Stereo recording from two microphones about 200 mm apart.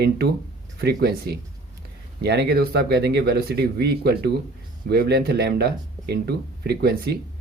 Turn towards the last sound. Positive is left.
turn(degrees=-55)  # may be behind; listen again after turning